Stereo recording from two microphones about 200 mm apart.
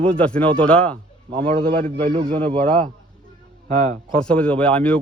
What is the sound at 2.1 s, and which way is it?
Speech, 25° right (ahead or behind).